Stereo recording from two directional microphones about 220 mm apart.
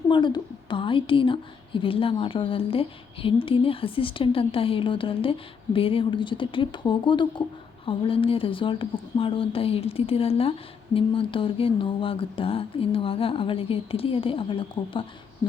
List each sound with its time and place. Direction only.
0.1 s a woman's voice: 20° left (ahead or behind)